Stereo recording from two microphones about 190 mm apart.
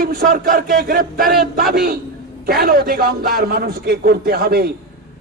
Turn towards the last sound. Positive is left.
turn(degrees=-55)  # may be behind; listen again after turning